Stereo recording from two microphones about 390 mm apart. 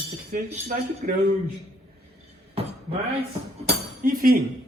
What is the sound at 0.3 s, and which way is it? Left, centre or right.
Speech, centre.